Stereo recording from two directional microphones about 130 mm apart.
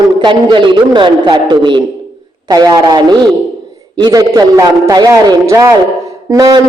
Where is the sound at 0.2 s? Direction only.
40° right (ahead or behind).